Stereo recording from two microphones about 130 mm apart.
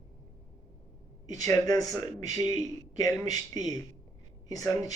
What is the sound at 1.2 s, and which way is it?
A man's voice, 25° left (ahead or behind).